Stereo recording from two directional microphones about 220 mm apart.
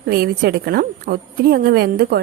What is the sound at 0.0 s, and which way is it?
A woman's voice, 45° right (ahead or behind).